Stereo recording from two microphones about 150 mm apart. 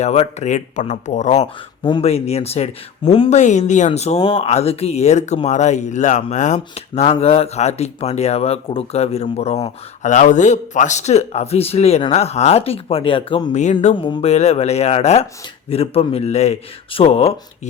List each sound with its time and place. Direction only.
0.0 s speech: 45° left (ahead or behind)
1.8 s speech: 40° left (ahead or behind)
13.5 s speech: 50° left (ahead or behind)
13.9 s speech: 35° left (ahead or behind)